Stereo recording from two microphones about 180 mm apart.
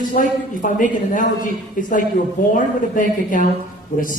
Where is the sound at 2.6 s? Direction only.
45° left (ahead or behind).